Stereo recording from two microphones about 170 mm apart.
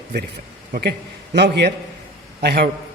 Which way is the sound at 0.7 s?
70° right (ahead or behind).